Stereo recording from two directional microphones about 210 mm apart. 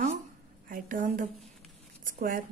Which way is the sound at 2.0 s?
40° right (ahead or behind).